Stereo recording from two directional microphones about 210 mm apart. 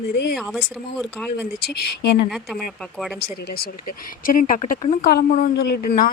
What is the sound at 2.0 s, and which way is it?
Speech, 50° left (ahead or behind).